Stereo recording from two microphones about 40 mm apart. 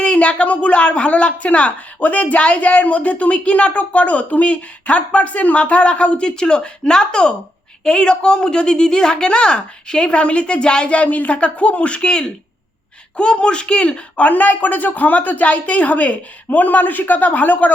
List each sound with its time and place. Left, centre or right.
0.0 s a woman's voice: left